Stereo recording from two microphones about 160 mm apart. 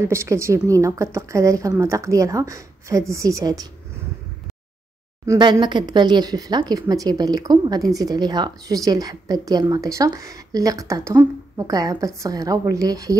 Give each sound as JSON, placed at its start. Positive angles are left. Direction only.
{"t": 0.0, "sound": "speech", "side_deg": -15}
{"t": 5.2, "sound": "speech", "side_deg": -25}